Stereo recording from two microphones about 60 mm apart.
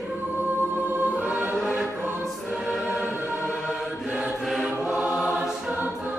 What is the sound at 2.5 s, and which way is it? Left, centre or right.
Music, centre.